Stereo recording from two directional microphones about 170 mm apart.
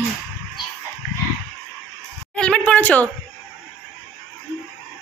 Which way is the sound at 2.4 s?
5° left (ahead or behind).